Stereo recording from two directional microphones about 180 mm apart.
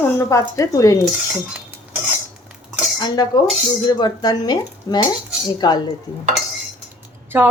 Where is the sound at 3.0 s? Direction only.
25° left (ahead or behind).